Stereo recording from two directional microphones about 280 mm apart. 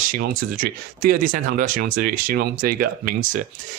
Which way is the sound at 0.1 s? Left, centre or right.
Right.